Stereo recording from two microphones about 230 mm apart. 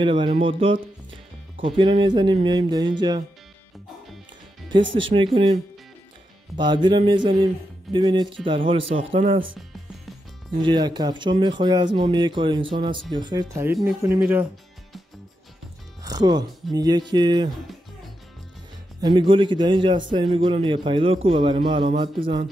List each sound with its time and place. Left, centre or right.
0.0 s speech: right
5.1 s speech: right
10.6 s speech: centre
16.0 s music: centre
16.7 s speech: centre
18.9 s speech: centre